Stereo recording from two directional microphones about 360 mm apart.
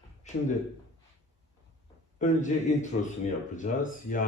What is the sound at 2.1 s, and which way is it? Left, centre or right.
Speech, left.